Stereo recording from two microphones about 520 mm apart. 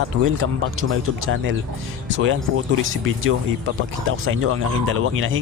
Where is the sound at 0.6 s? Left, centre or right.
Right.